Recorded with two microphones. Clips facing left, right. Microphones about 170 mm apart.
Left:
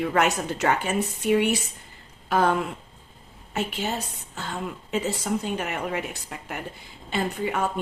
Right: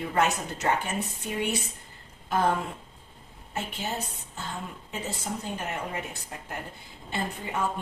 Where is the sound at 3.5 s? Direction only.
90° left.